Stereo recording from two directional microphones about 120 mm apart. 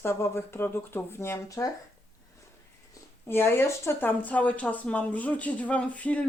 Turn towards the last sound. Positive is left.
turn(degrees=10)  # may be behind; listen again after turning